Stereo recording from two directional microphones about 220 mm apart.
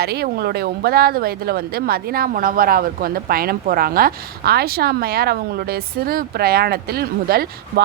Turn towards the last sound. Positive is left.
turn(degrees=-45)  # may be behind; listen again after turning